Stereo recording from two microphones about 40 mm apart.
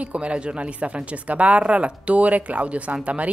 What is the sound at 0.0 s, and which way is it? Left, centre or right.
Speech, right.